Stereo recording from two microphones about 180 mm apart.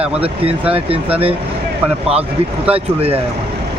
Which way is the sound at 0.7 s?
30° right (ahead or behind).